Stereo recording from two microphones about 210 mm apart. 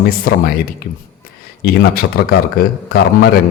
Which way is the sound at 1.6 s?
45° left (ahead or behind).